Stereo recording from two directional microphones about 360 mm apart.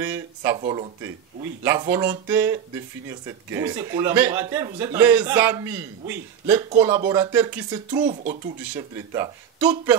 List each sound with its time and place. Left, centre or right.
0.0 s speech: centre
8.0 s speech: right
8.7 s speech: centre